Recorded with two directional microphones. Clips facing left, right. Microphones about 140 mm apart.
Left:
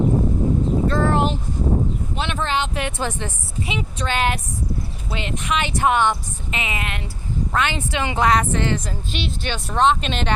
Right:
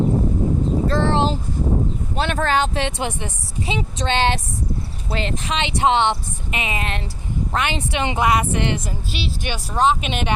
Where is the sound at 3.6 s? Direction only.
30° right (ahead or behind).